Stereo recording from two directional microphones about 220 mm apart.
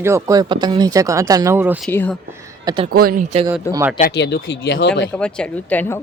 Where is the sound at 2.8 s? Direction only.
45° right (ahead or behind).